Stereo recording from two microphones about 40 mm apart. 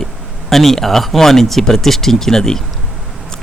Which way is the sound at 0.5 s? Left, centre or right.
Centre.